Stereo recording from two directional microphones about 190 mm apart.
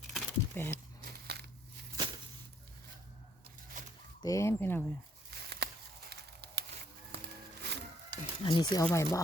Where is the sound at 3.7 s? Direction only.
40° right (ahead or behind).